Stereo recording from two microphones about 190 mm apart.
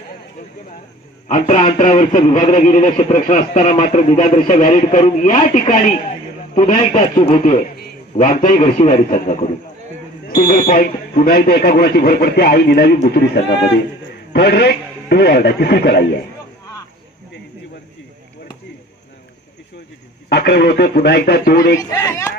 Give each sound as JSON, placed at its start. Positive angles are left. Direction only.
{"t": 1.3, "sound": "a man's voice", "side_deg": 40}
{"t": 8.6, "sound": "a man's voice", "side_deg": 30}
{"t": 9.1, "sound": "a man's voice", "side_deg": 40}
{"t": 20.2, "sound": "a man's voice", "side_deg": 60}
{"t": 21.7, "sound": "speech", "side_deg": 15}